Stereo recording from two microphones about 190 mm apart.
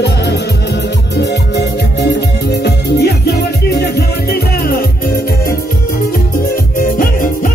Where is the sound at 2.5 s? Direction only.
60° left (ahead or behind).